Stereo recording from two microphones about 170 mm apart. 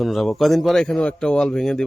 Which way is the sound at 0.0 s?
Centre (ahead or behind).